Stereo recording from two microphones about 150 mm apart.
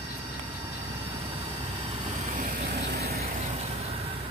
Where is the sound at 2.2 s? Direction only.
65° right (ahead or behind); by 3.4 s 85° right.